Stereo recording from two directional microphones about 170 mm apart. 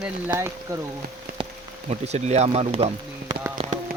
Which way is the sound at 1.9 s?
40° right (ahead or behind).